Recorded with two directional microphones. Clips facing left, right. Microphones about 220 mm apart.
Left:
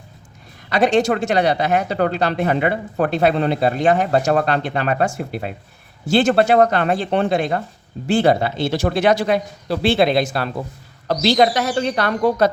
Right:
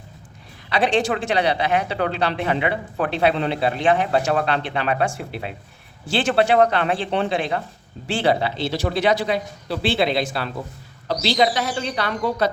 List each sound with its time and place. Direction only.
0.7 s speech: 45° left (ahead or behind)